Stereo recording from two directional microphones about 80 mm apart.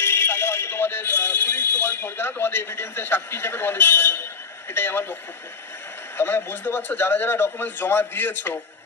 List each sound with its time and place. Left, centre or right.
0.0 s speech: left
6.1 s speech: left